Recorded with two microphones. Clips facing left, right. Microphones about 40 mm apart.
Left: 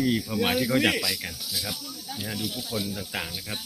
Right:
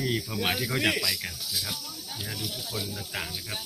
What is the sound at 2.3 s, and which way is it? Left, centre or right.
Speech, left.